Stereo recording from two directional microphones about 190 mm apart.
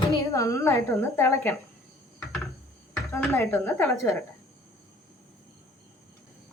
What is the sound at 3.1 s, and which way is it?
A woman's voice, 15° left (ahead or behind).